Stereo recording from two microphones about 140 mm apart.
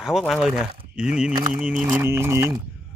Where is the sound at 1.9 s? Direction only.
15° right (ahead or behind).